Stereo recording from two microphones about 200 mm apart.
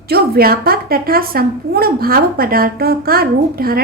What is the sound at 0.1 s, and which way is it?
A woman's voice, 50° right (ahead or behind).